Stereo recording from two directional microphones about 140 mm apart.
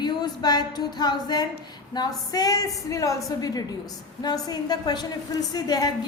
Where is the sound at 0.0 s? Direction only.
30° left (ahead or behind).